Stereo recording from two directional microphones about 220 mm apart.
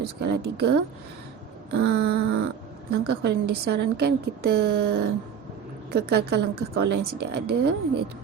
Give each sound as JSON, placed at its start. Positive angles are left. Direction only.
{"t": 0.0, "sound": "a woman's voice", "side_deg": -45}